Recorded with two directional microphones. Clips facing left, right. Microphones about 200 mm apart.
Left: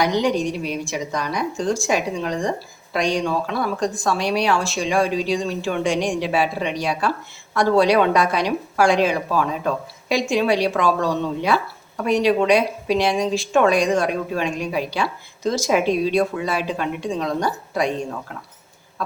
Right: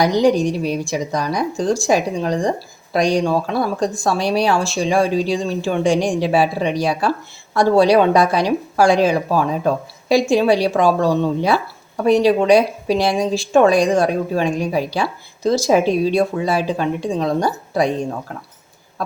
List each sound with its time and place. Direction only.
0.0 s a woman's voice: 35° right (ahead or behind)